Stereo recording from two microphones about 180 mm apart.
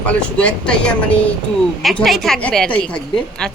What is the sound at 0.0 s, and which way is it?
A woman's voice, 5° left (ahead or behind).